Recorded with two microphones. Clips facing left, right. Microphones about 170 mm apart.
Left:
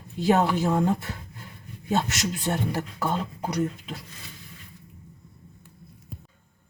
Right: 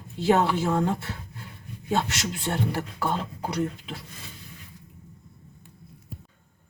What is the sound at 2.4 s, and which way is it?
Speech, 20° left (ahead or behind).